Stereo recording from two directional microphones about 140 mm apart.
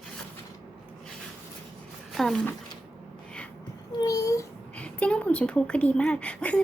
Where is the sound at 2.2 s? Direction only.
Centre (ahead or behind).